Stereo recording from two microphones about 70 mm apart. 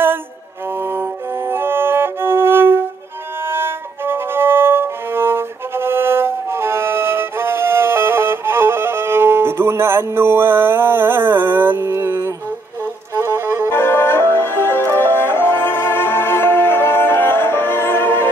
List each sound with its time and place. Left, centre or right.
0.7 s music: right
3.4 s violin: right
11.9 s music: right
13.7 s music: left